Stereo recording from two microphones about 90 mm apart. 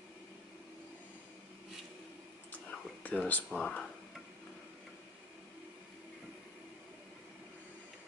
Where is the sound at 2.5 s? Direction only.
15° left (ahead or behind).